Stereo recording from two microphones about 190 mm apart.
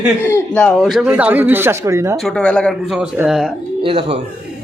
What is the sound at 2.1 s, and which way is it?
Speech, 5° left (ahead or behind).